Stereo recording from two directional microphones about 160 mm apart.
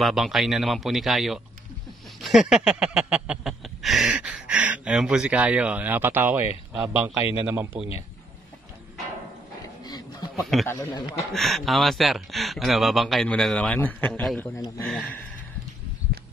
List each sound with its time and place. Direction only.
0.0 s speech: centre (ahead or behind)
2.2 s a sound: 5° right (ahead or behind)
6.7 s a man's voice: 10° right (ahead or behind)
10.3 s speech: centre (ahead or behind)
10.7 s a man's voice: 20° left (ahead or behind)
11.3 s speech: centre (ahead or behind)